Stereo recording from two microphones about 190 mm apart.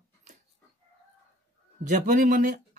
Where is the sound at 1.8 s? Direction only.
40° right (ahead or behind).